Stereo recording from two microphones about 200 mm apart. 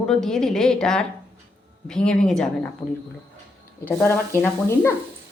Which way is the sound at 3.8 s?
10° left (ahead or behind).